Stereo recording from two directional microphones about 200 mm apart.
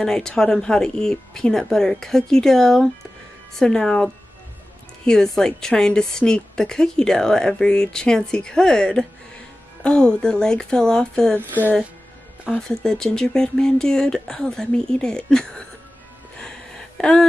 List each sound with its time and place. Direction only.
0.0 s a woman's voice: 5° left (ahead or behind)
12.4 s a woman's voice: centre (ahead or behind)
16.3 s a sound: 5° left (ahead or behind)